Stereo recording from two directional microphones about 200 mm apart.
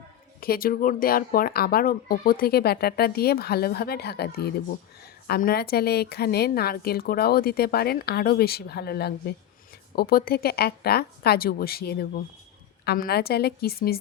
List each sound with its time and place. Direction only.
0.3 s speech: 50° left (ahead or behind)